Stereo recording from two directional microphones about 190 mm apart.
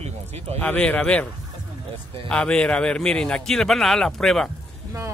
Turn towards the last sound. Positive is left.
turn(degrees=0)  # may be behind; listen again after turning